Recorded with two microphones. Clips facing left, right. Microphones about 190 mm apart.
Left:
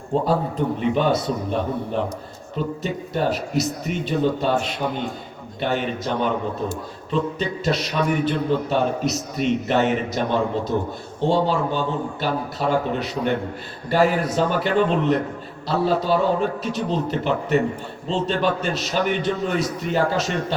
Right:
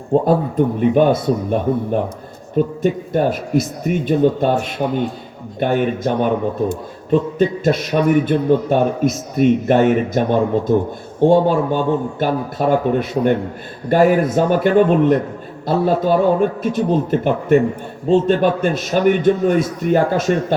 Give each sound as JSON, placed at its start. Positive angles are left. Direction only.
{"t": 0.1, "sound": "a man's voice", "side_deg": -50}